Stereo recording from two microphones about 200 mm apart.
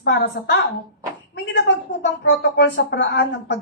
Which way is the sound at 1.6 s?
60° left (ahead or behind).